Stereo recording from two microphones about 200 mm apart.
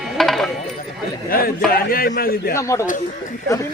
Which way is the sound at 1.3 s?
45° left (ahead or behind).